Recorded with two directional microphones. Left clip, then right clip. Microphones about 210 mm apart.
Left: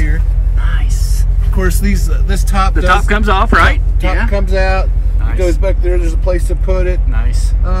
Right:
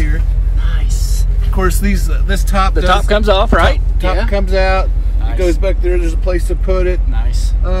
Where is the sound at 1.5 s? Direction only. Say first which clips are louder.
Right 1 dB; 20° right (ahead or behind).